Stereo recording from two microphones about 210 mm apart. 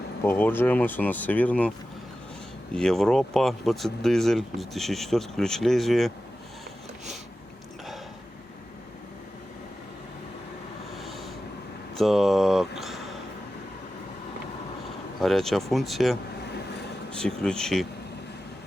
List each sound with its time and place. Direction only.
0.3 s speech: 10° left (ahead or behind)
2.7 s speech: centre (ahead or behind)
10.9 s a sound: centre (ahead or behind)
11.9 s speech: centre (ahead or behind)
15.2 s speech: centre (ahead or behind)